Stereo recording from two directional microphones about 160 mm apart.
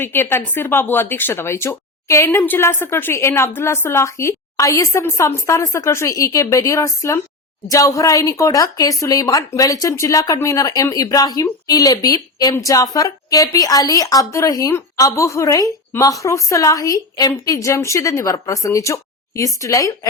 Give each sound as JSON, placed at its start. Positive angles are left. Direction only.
{"t": 0.0, "sound": "a woman's voice", "side_deg": 15}